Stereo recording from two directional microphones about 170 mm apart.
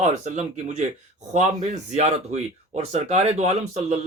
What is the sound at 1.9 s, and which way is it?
Speech, 40° right (ahead or behind).